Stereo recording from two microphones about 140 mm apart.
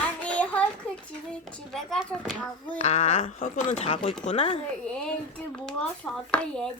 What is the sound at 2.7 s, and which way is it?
Speech, 55° left (ahead or behind).